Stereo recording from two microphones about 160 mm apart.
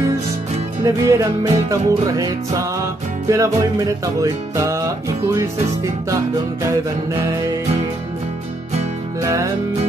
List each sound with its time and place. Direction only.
0.8 s music: 20° right (ahead or behind)
6.6 s music: 20° right (ahead or behind)
9.2 s music: 20° right (ahead or behind)